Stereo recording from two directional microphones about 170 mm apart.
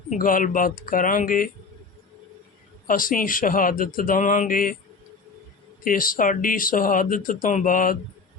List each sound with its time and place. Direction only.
0.1 s speech: 55° left (ahead or behind)
2.8 s speech: 55° left (ahead or behind)
5.8 s speech: 55° left (ahead or behind)